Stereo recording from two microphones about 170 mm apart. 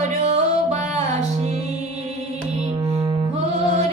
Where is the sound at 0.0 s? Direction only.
40° right (ahead or behind).